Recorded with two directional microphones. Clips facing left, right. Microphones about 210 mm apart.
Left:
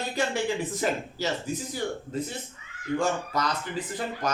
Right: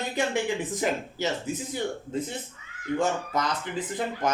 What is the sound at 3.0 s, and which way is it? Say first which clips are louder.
Speech: right 1 dB; 20° right (ahead or behind).